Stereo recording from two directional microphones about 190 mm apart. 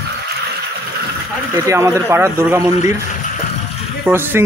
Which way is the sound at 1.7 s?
15° right (ahead or behind).